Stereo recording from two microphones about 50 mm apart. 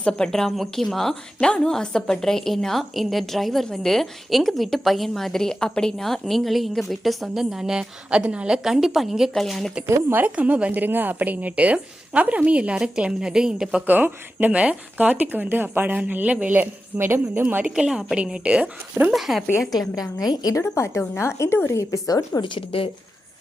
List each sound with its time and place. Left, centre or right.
0.3 s a woman's voice: centre
1.4 s a woman's voice: centre; by 8.6 s right
8.6 s a woman's voice: centre
9.3 s a woman's voice: centre
9.8 s speech: right
10.2 s a woman's voice: right; by 13.8 s centre
13.8 s speech: right
16.6 s speech: right
17.4 s speech: right
17.7 s a woman's voice: centre
18.6 s speech: right
19.1 s a woman's voice: centre
20.7 s a woman's voice: left
21.7 s a woman's voice: left